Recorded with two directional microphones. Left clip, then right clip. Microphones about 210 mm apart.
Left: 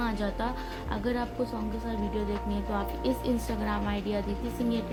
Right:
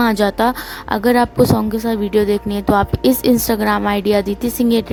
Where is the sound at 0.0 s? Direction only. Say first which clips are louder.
Right 17 dB; 60° right (ahead or behind).